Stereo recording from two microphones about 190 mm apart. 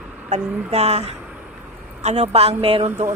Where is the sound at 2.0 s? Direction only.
35° right (ahead or behind).